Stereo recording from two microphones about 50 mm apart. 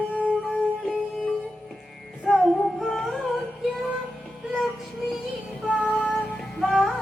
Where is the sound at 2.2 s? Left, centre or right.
Centre.